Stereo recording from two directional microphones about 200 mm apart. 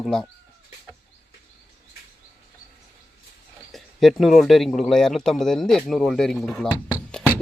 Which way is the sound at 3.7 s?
Centre (ahead or behind).